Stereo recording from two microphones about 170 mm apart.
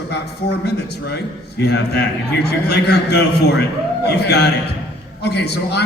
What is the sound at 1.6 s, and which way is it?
A man's voice, 75° left (ahead or behind).